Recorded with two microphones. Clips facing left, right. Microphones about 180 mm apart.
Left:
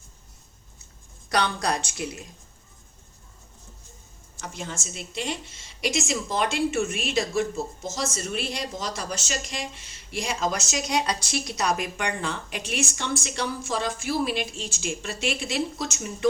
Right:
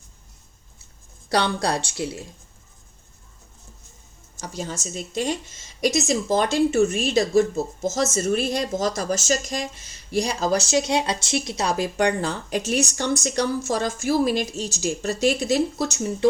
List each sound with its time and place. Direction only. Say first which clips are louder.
1.3 s speech: right 3 dB; 30° right (ahead or behind)
4.4 s speech: right 4 dB; 35° right (ahead or behind)